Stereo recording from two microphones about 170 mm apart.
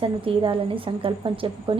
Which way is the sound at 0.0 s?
30° right (ahead or behind).